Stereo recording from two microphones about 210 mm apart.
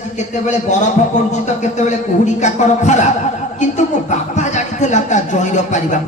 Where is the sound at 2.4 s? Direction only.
35° left (ahead or behind).